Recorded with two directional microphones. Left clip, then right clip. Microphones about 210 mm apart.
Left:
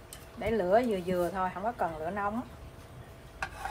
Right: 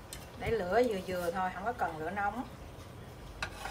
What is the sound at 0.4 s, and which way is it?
Speech, 20° left (ahead or behind).